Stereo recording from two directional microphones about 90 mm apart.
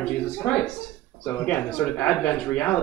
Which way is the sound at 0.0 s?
15° left (ahead or behind).